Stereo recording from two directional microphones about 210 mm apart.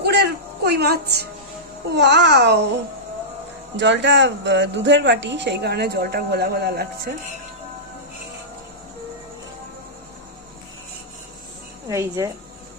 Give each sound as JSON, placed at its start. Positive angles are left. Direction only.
{"t": 0.0, "sound": "music", "side_deg": -50}
{"t": 2.0, "sound": "speech", "side_deg": -55}
{"t": 3.8, "sound": "speech", "side_deg": -55}
{"t": 11.9, "sound": "a woman's voice", "side_deg": -15}